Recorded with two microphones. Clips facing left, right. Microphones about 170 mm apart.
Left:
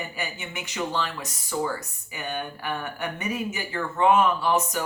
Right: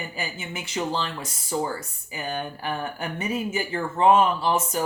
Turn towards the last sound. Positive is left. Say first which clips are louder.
# right 1 dB
turn(degrees=-30)  # may be behind; listen again after turning